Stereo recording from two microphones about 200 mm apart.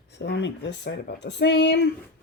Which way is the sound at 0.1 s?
55° left (ahead or behind).